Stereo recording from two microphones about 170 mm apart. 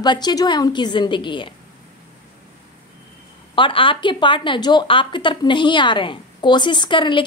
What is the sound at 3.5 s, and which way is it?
A woman's voice, 30° left (ahead or behind).